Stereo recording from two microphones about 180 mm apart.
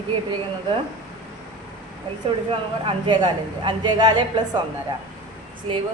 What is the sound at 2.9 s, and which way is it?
A woman's voice, 25° right (ahead or behind).